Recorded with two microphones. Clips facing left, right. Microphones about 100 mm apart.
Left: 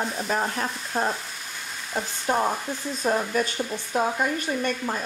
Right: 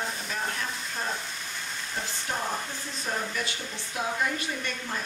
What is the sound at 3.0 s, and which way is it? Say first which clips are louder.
Frying: left 8 dB; 45° left (ahead or behind).